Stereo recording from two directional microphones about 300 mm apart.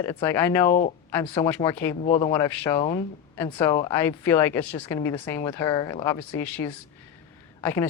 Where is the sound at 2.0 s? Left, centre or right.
Left.